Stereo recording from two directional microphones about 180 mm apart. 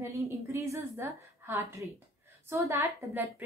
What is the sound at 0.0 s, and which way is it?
A woman's voice, 15° right (ahead or behind).